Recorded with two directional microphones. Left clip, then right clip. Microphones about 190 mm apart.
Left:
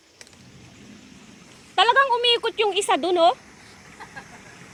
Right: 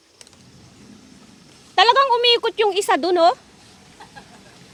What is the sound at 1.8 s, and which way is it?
Speech, 35° right (ahead or behind).